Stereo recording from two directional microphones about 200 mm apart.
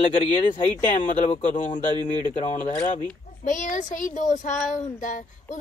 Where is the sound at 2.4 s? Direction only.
35° left (ahead or behind).